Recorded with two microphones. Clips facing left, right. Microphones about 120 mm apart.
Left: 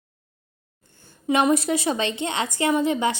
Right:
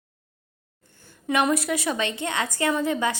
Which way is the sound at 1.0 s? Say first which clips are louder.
Left 3 dB; 25° left (ahead or behind).